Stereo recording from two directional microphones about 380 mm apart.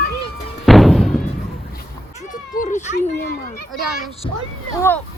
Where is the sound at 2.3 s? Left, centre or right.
Left.